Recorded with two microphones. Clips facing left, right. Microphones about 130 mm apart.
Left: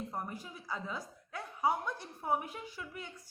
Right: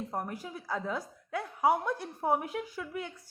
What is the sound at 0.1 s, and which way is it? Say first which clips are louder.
A woman's voice: right 5 dB; 75° right (ahead or behind).